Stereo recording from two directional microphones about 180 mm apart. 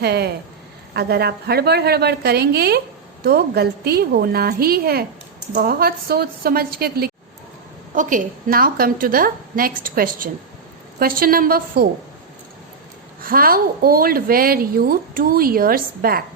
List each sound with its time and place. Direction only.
0.0 s a woman's voice: 65° right (ahead or behind)
7.9 s a woman's voice: 45° right (ahead or behind)
13.2 s a woman's voice: 55° right (ahead or behind)